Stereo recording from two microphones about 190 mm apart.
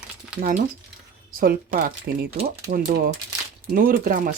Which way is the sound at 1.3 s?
50° right (ahead or behind).